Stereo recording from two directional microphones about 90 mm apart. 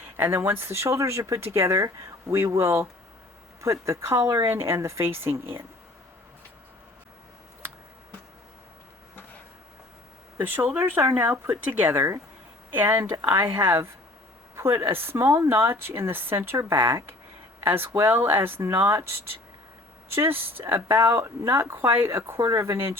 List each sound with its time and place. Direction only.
0.2 s speech: 25° right (ahead or behind)
10.3 s speech: 20° right (ahead or behind); by 19.0 s 35° right (ahead or behind)
20.1 s speech: 25° right (ahead or behind)
22.4 s speech: 35° right (ahead or behind)